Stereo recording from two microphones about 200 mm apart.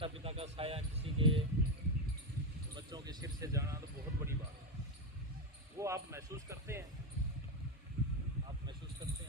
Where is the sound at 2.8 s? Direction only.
20° right (ahead or behind).